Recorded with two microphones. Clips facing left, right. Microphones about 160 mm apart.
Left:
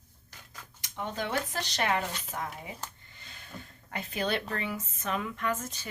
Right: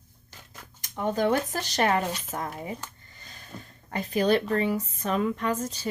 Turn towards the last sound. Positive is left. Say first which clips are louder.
# right 5 dB
turn(degrees=-35)  # may be behind; listen again after turning